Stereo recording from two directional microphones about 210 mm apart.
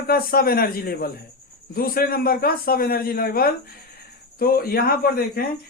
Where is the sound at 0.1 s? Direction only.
45° left (ahead or behind).